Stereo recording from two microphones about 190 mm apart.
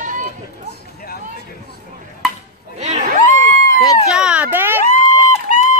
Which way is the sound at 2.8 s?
35° right (ahead or behind).